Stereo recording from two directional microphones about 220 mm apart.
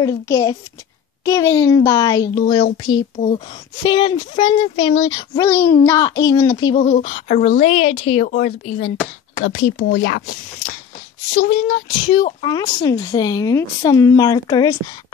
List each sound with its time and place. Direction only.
0.0 s a woman's voice: 15° left (ahead or behind)
8.3 s speech: 40° left (ahead or behind)
9.4 s speech: 50° left (ahead or behind)
11.3 s speech: 50° left (ahead or behind)
11.9 s a woman's voice: 20° left (ahead or behind)